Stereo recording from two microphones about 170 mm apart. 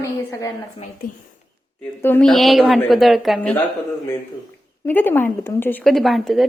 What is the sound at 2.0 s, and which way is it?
Speech, 10° left (ahead or behind).